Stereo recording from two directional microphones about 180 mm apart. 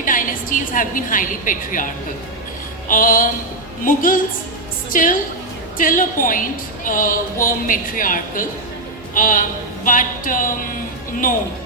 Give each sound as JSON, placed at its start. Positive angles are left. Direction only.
{"t": 0.0, "sound": "a woman's voice", "side_deg": 50}
{"t": 2.9, "sound": "a woman's voice", "side_deg": 50}